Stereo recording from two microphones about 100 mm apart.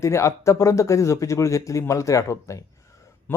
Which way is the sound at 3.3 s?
20° left (ahead or behind).